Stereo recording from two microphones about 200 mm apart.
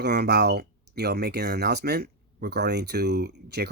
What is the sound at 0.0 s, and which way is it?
Speech, 55° right (ahead or behind).